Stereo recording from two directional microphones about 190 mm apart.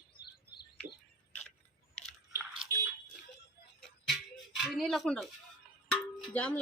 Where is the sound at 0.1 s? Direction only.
30° left (ahead or behind).